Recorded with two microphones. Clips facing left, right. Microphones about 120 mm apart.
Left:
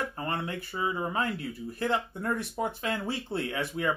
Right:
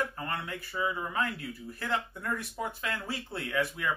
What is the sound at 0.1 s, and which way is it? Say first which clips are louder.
Speech: left 3 dB; 30° left (ahead or behind).